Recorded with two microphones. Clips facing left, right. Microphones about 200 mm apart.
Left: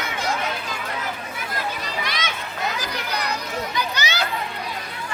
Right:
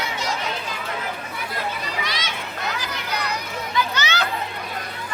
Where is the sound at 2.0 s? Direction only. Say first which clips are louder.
Left 1 dB; 55° left (ahead or behind).